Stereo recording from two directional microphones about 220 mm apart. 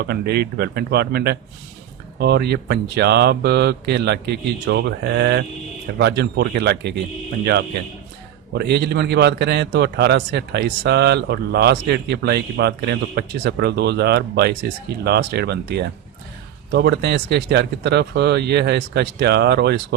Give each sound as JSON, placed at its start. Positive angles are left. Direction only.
{"t": 0.0, "sound": "a man's voice", "side_deg": -50}
{"t": 8.5, "sound": "a man's voice", "side_deg": -50}